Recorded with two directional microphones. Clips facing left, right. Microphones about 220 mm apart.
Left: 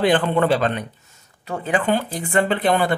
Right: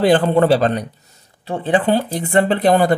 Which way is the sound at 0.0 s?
40° right (ahead or behind).